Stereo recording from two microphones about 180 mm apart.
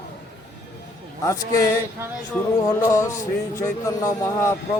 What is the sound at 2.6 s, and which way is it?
A man's voice, 15° left (ahead or behind).